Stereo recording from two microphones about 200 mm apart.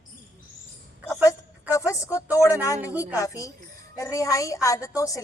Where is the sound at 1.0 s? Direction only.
15° left (ahead or behind).